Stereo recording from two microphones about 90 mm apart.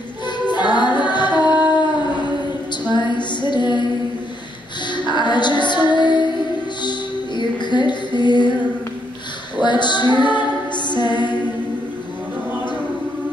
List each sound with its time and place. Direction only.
0.5 s music: 55° left (ahead or behind)
2.9 s female singing: 55° left (ahead or behind)
4.9 s music: 55° left (ahead or behind)
9.6 s music: 55° left (ahead or behind)